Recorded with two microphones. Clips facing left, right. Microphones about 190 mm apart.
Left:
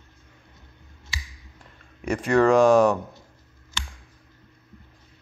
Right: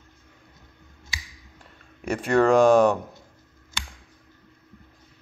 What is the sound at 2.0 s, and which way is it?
Speech, 30° right (ahead or behind).